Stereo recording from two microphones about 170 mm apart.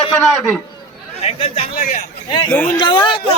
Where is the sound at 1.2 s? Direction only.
35° left (ahead or behind).